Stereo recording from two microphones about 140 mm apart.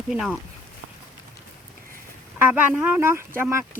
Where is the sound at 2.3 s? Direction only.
15° right (ahead or behind).